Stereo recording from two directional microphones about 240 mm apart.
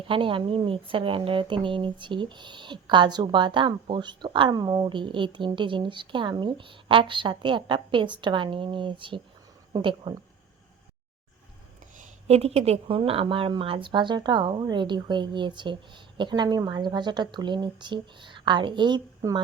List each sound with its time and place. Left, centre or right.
0.0 s speech: right
11.9 s speech: right